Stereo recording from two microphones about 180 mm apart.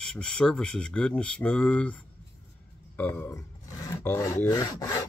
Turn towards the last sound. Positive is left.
turn(degrees=20)  # may be behind; listen again after turning